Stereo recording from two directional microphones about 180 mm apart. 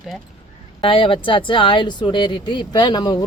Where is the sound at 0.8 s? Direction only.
30° left (ahead or behind).